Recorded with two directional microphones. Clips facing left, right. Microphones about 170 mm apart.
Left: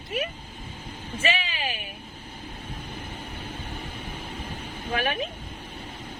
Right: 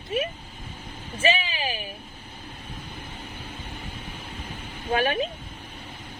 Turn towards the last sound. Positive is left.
turn(degrees=-30)  # may be behind; listen again after turning